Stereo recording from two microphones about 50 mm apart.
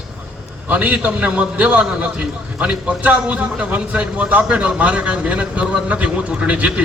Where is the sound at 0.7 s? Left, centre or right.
Right.